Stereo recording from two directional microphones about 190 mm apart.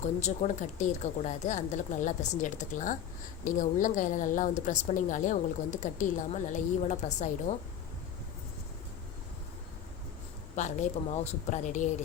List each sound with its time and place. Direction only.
0.0 s a woman's voice: 35° left (ahead or behind)
10.5 s speech: 40° left (ahead or behind)